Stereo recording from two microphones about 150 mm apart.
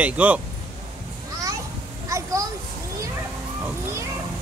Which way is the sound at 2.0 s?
20° right (ahead or behind).